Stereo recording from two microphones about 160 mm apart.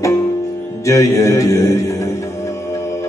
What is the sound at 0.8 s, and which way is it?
Music, 20° left (ahead or behind).